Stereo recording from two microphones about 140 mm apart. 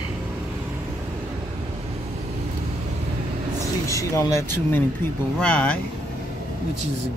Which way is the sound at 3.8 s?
20° left (ahead or behind).